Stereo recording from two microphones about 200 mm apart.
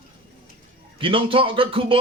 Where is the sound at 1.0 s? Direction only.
25° right (ahead or behind).